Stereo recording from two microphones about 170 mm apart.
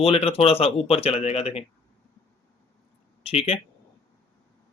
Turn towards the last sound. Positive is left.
turn(degrees=35)  # may be behind; listen again after turning